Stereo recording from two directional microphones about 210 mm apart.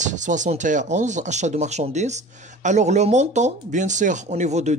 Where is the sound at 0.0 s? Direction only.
35° right (ahead or behind).